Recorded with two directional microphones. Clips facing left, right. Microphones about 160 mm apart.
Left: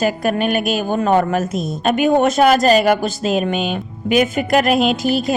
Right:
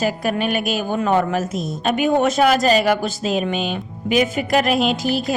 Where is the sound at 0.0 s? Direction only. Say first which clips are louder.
Left 3 dB; 50° left (ahead or behind).